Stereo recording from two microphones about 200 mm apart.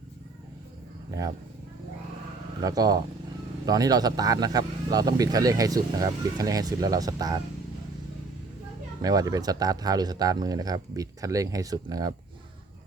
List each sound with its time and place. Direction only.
2.6 s speech: 20° right (ahead or behind)
9.0 s speech: 20° right (ahead or behind)